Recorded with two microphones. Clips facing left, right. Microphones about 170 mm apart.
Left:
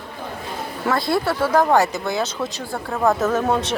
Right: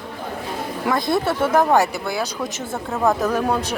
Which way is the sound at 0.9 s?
20° right (ahead or behind).